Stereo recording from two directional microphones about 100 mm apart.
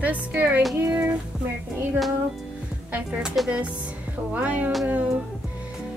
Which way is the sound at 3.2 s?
5° right (ahead or behind).